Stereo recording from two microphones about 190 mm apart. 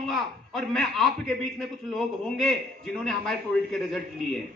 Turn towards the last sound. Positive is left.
turn(degrees=0)  # may be behind; listen again after turning